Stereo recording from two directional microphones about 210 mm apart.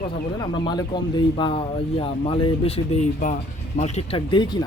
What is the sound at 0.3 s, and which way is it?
Speech, 20° left (ahead or behind).